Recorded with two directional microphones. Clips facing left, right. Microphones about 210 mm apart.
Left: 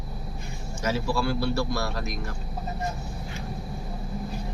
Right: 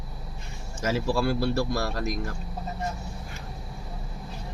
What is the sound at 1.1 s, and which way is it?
Speech, 45° right (ahead or behind).